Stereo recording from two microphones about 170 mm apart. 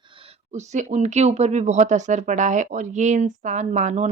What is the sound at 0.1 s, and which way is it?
A woman's voice, 35° right (ahead or behind).